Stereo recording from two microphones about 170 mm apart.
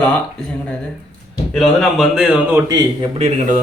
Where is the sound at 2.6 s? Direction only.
25° right (ahead or behind).